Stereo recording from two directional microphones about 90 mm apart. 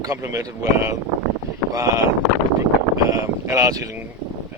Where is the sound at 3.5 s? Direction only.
40° right (ahead or behind).